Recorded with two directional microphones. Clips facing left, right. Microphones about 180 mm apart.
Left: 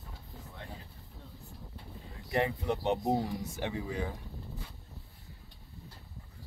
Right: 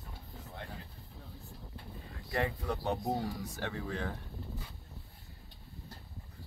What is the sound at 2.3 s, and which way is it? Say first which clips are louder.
Speech: left 4 dB; 20° left (ahead or behind).